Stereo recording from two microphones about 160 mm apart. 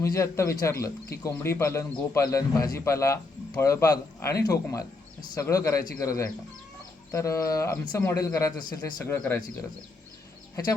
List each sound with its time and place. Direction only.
0.0 s speech: 20° left (ahead or behind)